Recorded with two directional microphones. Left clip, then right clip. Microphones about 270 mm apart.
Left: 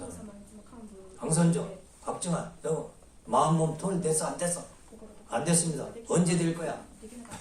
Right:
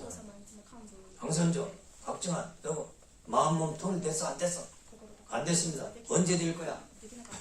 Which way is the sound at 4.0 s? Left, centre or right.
Left.